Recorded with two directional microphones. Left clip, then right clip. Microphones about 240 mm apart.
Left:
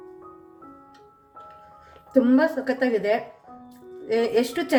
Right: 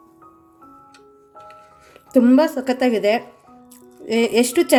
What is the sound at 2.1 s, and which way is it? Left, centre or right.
A woman's voice, right.